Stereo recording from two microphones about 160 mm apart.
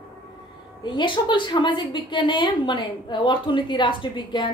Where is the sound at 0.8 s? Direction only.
30° left (ahead or behind).